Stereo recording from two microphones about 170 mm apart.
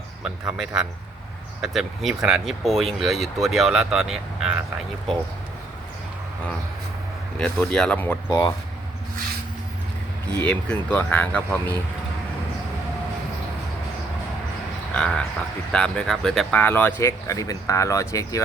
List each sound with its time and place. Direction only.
0.5 s speech: 5° right (ahead or behind)
7.3 s speech: 5° left (ahead or behind)
8.3 s speech: 20° left (ahead or behind)
10.3 s speech: 10° left (ahead or behind)
14.9 s frog: 5° left (ahead or behind)
15.7 s speech: 5° left (ahead or behind)